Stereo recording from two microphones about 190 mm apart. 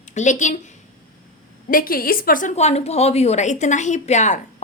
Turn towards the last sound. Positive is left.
turn(degrees=40)  # may be behind; listen again after turning